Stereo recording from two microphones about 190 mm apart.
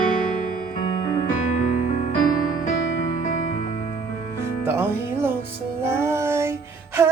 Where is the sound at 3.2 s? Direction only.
45° left (ahead or behind).